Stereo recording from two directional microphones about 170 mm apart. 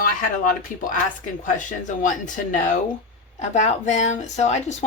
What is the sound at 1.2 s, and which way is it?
Speech, 50° left (ahead or behind).